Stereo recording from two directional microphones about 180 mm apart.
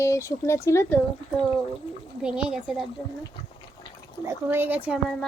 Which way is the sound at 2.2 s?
5° right (ahead or behind).